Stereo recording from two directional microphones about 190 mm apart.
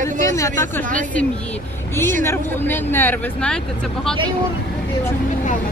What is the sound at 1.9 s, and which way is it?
Speech, 10° left (ahead or behind).